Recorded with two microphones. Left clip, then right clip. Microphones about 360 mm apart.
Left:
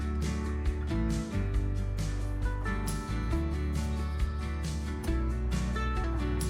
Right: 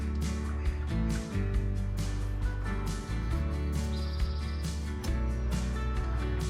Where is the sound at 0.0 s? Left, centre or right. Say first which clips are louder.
Left 2 dB; centre.